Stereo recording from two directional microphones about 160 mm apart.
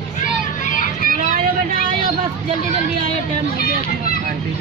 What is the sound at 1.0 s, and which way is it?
Vehicle, 55° right (ahead or behind).